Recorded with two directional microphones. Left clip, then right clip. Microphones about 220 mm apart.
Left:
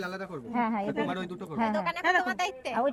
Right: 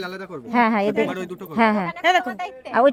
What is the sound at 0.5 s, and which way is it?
Speech, 60° right (ahead or behind).